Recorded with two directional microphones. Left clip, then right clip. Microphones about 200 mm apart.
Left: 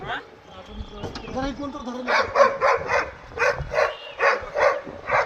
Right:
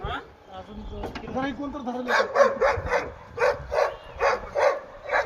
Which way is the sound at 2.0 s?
65° right (ahead or behind).